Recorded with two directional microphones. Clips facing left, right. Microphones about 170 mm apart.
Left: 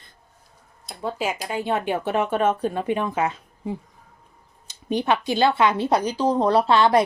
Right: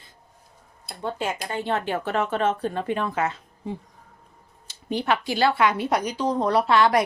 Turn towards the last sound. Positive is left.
turn(degrees=30)  # may be behind; listen again after turning